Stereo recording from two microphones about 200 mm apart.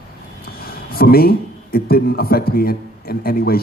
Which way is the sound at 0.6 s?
50° left (ahead or behind).